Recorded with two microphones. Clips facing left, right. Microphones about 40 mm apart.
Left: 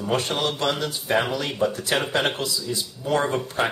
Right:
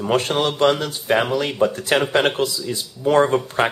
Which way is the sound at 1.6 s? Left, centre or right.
Right.